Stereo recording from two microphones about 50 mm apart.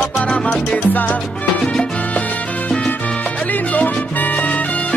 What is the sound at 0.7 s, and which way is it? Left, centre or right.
Music, left.